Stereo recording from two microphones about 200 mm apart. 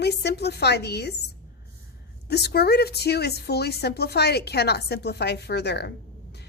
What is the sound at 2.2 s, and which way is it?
A woman's voice, 55° left (ahead or behind).